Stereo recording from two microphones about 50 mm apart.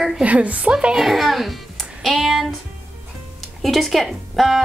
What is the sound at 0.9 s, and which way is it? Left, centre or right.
Speech, centre.